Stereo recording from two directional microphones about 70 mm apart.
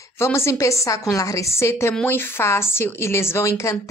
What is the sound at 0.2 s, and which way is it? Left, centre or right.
A woman's voice, left.